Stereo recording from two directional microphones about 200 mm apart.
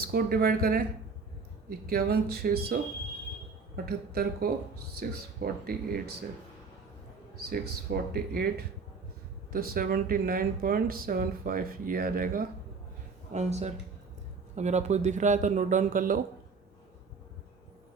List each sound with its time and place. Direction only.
0.0 s speech: 50° right (ahead or behind)
1.9 s speech: 50° right (ahead or behind)
3.8 s speech: 50° right (ahead or behind)
7.5 s speech: 50° right (ahead or behind)
13.3 s a man's voice: 35° right (ahead or behind)